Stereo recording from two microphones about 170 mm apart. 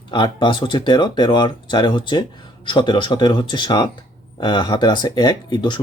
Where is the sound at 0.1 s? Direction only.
30° left (ahead or behind).